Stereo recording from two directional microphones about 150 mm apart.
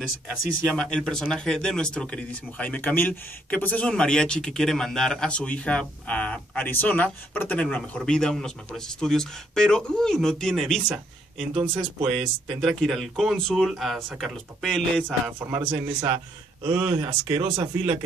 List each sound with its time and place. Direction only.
0.7 s speech: 5° left (ahead or behind)
12.0 s speech: centre (ahead or behind)
15.3 s speech: 15° right (ahead or behind)
15.6 s speech: 30° right (ahead or behind)